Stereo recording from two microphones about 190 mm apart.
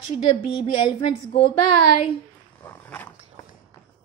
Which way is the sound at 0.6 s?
25° left (ahead or behind).